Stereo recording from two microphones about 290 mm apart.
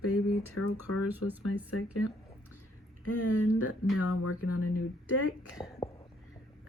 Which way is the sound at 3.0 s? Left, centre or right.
Left.